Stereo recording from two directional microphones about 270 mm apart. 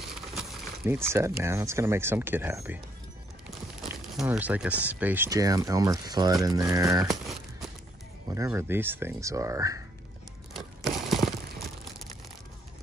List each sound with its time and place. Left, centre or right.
0.1 s speech: centre
8.3 s speech: centre
10.5 s a sound: centre